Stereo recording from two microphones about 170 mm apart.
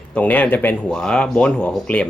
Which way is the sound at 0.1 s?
10° left (ahead or behind).